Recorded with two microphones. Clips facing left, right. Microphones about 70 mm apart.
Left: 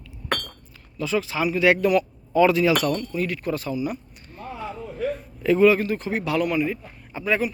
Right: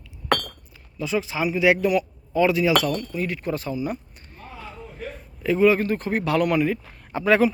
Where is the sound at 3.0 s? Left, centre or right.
Right.